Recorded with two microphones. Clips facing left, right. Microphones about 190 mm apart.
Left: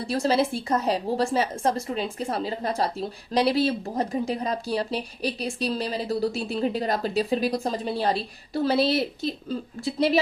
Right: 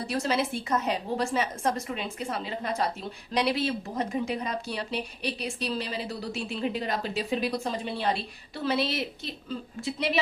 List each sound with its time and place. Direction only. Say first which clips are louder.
0.1 s a woman's voice: left 5 dB; 30° left (ahead or behind)